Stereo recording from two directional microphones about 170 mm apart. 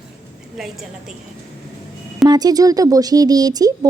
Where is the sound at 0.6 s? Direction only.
Centre (ahead or behind).